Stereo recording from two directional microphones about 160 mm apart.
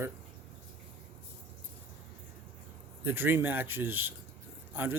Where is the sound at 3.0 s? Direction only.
15° right (ahead or behind).